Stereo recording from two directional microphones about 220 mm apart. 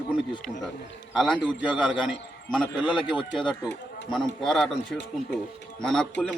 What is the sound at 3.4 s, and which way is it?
Speech, 15° left (ahead or behind).